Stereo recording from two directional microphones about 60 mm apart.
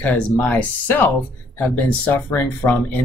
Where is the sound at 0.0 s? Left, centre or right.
Left.